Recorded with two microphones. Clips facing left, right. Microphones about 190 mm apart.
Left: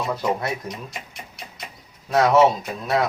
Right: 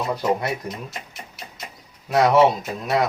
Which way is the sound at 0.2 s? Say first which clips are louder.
Right 2 dB; centre (ahead or behind).